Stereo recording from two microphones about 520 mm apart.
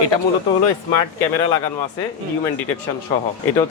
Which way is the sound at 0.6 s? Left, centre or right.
Left.